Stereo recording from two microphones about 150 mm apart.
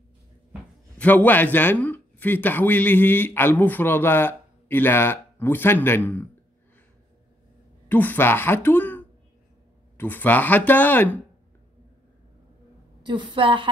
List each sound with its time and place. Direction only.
0.9 s a man's voice: 10° left (ahead or behind)
7.9 s a man's voice: 10° left (ahead or behind)
13.0 s a woman's voice: 30° right (ahead or behind)